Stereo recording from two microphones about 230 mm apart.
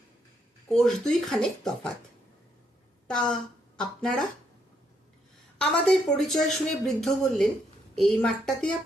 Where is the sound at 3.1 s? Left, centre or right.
Centre.